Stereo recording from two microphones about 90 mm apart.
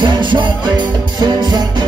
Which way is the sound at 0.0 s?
65° right (ahead or behind).